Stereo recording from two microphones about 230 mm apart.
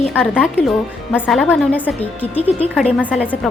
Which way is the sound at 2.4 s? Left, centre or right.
Left.